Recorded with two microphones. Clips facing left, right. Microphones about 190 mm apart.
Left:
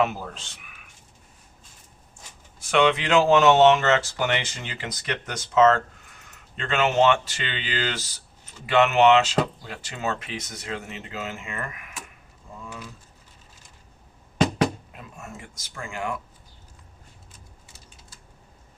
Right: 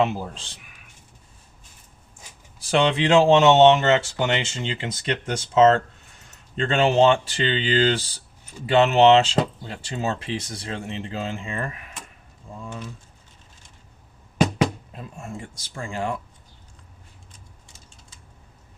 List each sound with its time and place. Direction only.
0.0 s speech: 30° right (ahead or behind)
2.6 s speech: 35° right (ahead or behind)
14.9 s speech: 30° right (ahead or behind)